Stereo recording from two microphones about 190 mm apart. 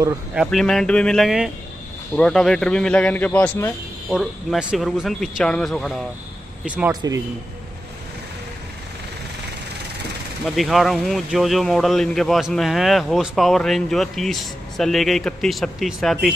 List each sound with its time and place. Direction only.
0.3 s speech: centre (ahead or behind)
6.9 s speech: 20° right (ahead or behind)
10.5 s speech: centre (ahead or behind)